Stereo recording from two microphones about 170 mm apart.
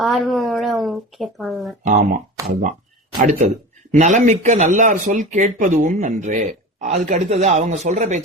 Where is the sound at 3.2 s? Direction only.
50° right (ahead or behind).